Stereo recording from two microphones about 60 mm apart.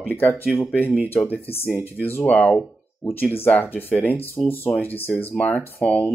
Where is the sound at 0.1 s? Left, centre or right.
Left.